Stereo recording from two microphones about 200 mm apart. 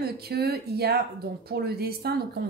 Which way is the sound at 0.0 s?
50° right (ahead or behind).